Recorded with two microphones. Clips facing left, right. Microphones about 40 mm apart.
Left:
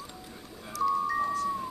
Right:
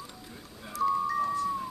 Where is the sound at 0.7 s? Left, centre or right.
Right.